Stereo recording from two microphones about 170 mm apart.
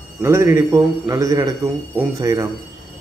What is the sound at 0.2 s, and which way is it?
A man's voice, 15° right (ahead or behind).